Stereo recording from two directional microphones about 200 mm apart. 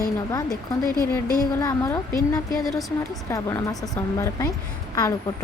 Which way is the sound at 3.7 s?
Centre (ahead or behind).